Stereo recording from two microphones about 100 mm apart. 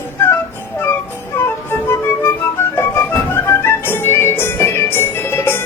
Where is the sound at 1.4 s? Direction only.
25° left (ahead or behind).